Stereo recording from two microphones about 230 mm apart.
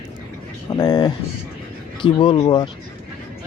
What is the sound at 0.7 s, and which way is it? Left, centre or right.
Speech, centre.